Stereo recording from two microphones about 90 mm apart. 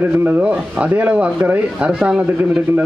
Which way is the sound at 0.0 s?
20° right (ahead or behind).